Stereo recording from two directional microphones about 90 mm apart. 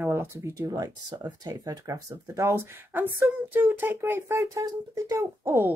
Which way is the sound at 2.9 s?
20° right (ahead or behind).